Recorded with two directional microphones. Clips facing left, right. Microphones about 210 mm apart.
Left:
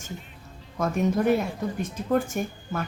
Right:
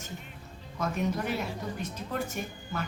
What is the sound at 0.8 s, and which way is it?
A woman's voice, 50° left (ahead or behind).